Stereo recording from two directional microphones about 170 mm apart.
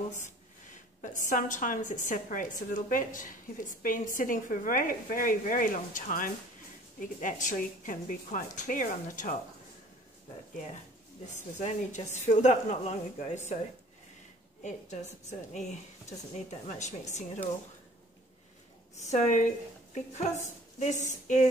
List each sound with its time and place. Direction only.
1.0 s a woman's voice: 50° left (ahead or behind)
11.2 s a woman's voice: 45° left (ahead or behind)
14.6 s a woman's voice: 45° left (ahead or behind)
18.9 s a woman's voice: 40° left (ahead or behind)